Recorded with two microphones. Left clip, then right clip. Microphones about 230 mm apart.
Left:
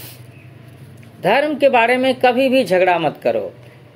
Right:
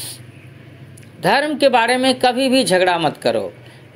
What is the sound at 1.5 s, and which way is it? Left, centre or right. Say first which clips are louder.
Speech: left 1 dB; right.